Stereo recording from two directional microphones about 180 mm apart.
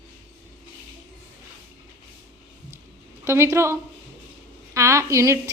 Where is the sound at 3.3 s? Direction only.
15° right (ahead or behind).